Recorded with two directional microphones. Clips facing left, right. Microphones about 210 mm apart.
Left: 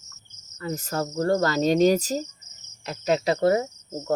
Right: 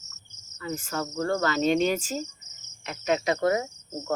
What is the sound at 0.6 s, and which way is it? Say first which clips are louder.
Speech: left 3 dB; 40° left (ahead or behind).